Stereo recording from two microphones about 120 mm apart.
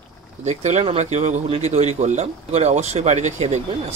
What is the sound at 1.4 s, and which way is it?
A man's voice, 60° right (ahead or behind).